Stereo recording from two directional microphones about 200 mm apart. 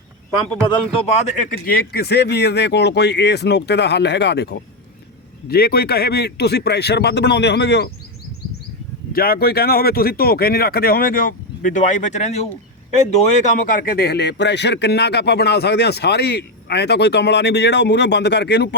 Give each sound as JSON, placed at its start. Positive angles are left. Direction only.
{"t": 0.7, "sound": "a man's voice", "side_deg": 35}
{"t": 9.1, "sound": "a man's voice", "side_deg": 50}